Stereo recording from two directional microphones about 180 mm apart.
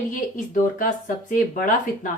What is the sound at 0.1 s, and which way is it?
A woman's voice, 45° left (ahead or behind).